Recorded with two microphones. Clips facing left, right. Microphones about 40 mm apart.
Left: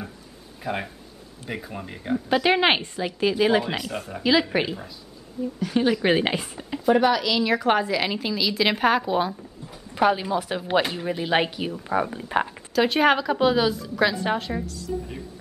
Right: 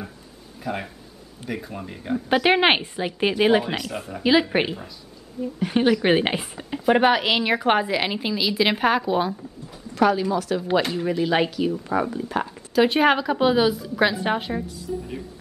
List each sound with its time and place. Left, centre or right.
0.7 s speech: centre
2.2 s a woman's voice: centre
3.2 s speech: right
3.6 s speech: centre
4.2 s a woman's voice: centre
6.0 s a woman's voice: centre
6.9 s speech: right
7.5 s a woman's voice: right; by 9.8 s centre
9.9 s a woman's voice: centre
10.8 s speech: centre
11.7 s speech: centre
12.1 s a woman's voice: left
12.7 s a woman's voice: centre